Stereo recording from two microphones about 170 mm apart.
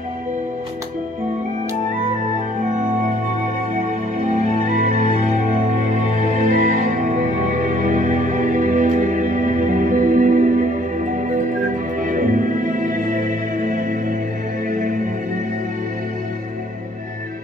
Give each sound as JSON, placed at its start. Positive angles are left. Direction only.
{"t": 3.7, "sound": "music", "side_deg": -50}